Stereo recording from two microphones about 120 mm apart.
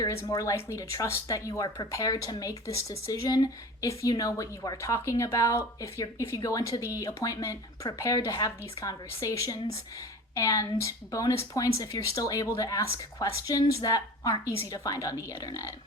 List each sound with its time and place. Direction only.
0.0 s speech: 25° left (ahead or behind)